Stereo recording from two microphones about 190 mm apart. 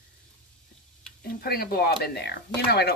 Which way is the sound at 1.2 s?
55° left (ahead or behind).